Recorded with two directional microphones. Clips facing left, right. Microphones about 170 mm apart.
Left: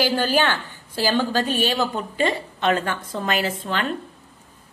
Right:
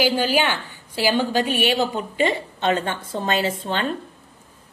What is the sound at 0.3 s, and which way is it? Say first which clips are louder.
A woman's voice: even; 10° right (ahead or behind).